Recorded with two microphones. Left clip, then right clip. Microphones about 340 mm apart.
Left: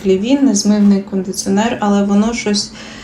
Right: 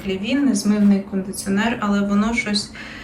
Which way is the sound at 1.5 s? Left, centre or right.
Centre.